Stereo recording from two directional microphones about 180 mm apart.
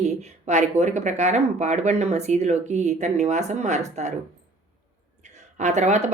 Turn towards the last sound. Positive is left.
turn(degrees=-40)  # may be behind; listen again after turning